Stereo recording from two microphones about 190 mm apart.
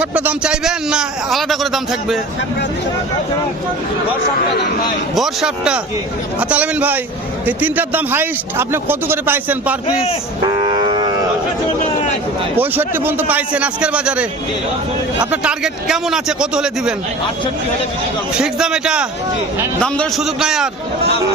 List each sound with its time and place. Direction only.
0.0 s a man's voice: 10° right (ahead or behind)
5.1 s a man's voice: centre (ahead or behind)
10.6 s livestock: 25° right (ahead or behind)
12.5 s a man's voice: 10° right (ahead or behind)
15.3 s a man's voice: 5° right (ahead or behind)
18.3 s a man's voice: 5° right (ahead or behind)